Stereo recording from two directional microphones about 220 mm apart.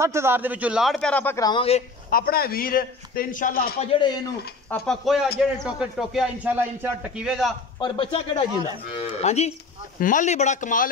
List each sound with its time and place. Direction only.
0.0 s a man's voice: 10° right (ahead or behind); by 1.8 s 20° left (ahead or behind)
2.0 s a man's voice: 40° left (ahead or behind)
4.6 s a man's voice: centre (ahead or behind)
7.8 s a man's voice: 20° left (ahead or behind)